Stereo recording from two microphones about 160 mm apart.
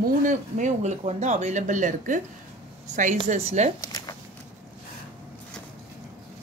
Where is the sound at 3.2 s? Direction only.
45° right (ahead or behind).